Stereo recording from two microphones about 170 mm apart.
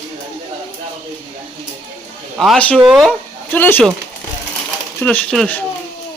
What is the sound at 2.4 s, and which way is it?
Speech, 5° left (ahead or behind).